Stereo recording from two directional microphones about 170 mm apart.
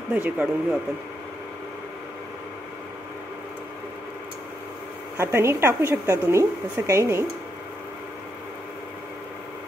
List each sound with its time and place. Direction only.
0.1 s a woman's voice: 10° right (ahead or behind)
5.1 s a woman's voice: 15° right (ahead or behind)